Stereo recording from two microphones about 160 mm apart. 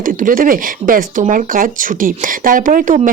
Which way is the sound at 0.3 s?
60° right (ahead or behind).